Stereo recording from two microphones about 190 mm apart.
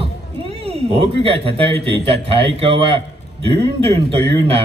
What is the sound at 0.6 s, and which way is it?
Speech, 30° right (ahead or behind).